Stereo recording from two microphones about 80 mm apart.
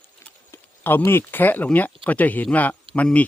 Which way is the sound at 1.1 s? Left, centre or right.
Left.